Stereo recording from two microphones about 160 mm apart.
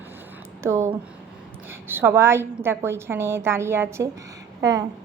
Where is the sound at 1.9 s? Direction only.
15° right (ahead or behind).